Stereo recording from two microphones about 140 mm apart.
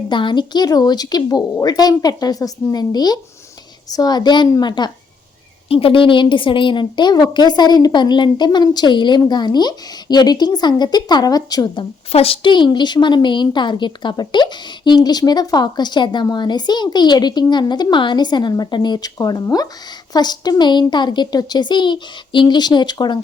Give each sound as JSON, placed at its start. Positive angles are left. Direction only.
{"t": 0.1, "sound": "a woman's voice", "side_deg": 35}
{"t": 5.6, "sound": "a woman's voice", "side_deg": 40}